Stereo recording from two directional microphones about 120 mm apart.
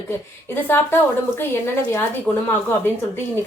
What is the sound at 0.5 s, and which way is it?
Speech, 20° left (ahead or behind).